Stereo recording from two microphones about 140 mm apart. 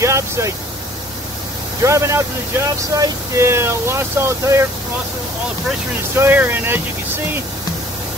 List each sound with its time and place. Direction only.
0.0 s a sound: 20° right (ahead or behind)
1.8 s speech: 20° right (ahead or behind)
6.1 s speech: 15° right (ahead or behind)